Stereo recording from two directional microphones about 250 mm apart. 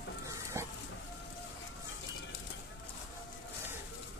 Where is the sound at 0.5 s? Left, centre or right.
Centre.